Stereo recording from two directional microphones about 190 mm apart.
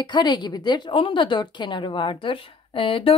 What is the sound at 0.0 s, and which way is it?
Speech, 25° left (ahead or behind).